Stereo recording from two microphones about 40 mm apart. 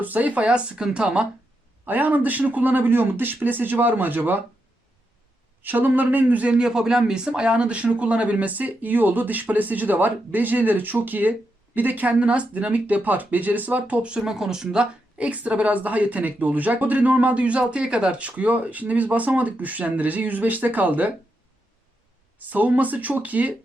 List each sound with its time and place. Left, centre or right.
0.0 s speech: right
1.9 s speech: right
5.6 s speech: right
6.6 s speech: centre; by 12.1 s right
12.2 s speech: right
14.2 s speech: centre
15.2 s speech: right
22.4 s speech: right